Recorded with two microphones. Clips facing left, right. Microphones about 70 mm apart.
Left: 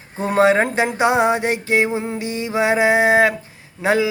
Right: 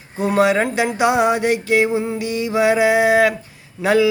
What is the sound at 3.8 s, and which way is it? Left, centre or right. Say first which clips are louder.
Speech: right 2 dB; left.